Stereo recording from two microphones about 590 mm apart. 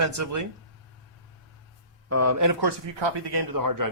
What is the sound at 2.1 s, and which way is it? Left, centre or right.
Speech, right.